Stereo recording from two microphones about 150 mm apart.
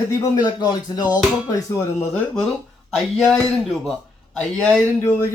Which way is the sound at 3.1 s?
Centre (ahead or behind).